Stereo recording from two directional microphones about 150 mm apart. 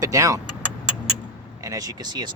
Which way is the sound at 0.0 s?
20° right (ahead or behind).